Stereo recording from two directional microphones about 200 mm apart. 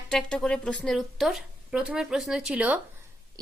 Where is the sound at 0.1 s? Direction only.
5° left (ahead or behind).